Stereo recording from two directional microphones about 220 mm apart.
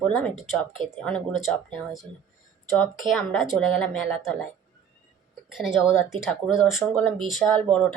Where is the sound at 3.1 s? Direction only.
Centre (ahead or behind).